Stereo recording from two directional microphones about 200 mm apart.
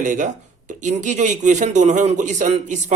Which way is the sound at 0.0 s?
40° right (ahead or behind).